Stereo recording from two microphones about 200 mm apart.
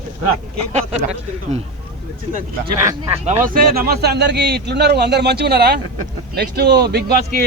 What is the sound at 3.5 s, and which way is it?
A man's voice, 45° right (ahead or behind).